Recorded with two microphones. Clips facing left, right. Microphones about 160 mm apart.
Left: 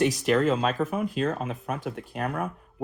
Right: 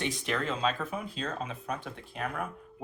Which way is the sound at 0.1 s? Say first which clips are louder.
Left 10 dB; 40° left (ahead or behind).